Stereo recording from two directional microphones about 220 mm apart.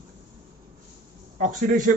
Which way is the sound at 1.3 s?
35° right (ahead or behind).